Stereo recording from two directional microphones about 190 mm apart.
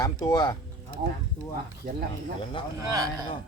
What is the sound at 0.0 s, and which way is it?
Speech, 15° left (ahead or behind).